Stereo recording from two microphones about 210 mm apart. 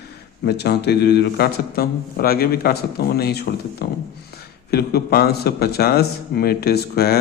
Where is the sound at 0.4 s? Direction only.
50° left (ahead or behind).